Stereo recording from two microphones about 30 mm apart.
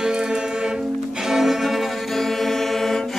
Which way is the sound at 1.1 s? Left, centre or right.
Centre.